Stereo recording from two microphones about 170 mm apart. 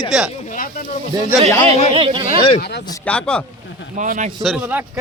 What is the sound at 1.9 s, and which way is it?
Speech, 30° right (ahead or behind).